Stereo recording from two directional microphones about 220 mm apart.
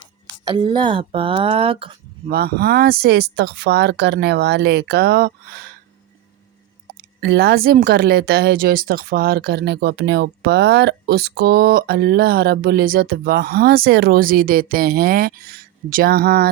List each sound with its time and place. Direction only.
0.5 s speech: 20° right (ahead or behind)
2.3 s speech: 45° right (ahead or behind)
6.9 s speech: 45° right (ahead or behind)